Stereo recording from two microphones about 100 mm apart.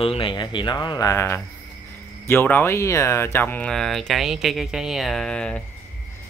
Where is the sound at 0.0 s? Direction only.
65° left (ahead or behind); by 1.1 s 40° left (ahead or behind).